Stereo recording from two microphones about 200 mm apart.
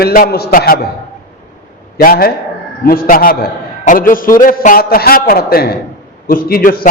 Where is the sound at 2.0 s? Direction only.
50° left (ahead or behind).